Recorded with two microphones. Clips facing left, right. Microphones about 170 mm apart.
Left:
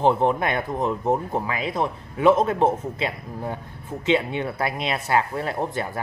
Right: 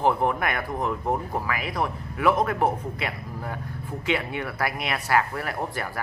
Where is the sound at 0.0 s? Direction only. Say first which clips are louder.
Left 3 dB; 25° left (ahead or behind).